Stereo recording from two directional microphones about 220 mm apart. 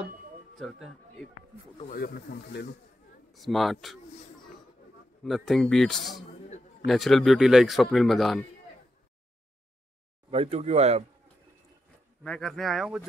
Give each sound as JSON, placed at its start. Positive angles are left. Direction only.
{"t": 0.6, "sound": "a man's voice", "side_deg": 0}
{"t": 1.9, "sound": "speech", "side_deg": 45}
{"t": 3.3, "sound": "a man's voice", "side_deg": 0}
{"t": 5.2, "sound": "a man's voice", "side_deg": 0}
{"t": 10.3, "sound": "speech", "side_deg": -25}
{"t": 12.2, "sound": "a man's voice", "side_deg": 0}